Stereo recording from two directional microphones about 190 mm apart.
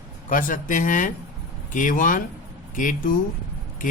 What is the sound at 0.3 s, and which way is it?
A man's voice, 45° left (ahead or behind).